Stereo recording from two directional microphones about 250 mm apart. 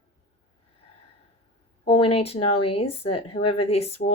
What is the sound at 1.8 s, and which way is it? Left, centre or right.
Speech, left.